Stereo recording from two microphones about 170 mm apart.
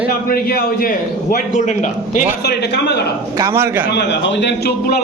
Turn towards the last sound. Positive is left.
turn(degrees=80)